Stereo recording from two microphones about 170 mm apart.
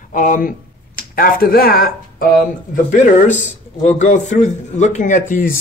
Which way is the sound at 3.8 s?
45° left (ahead or behind).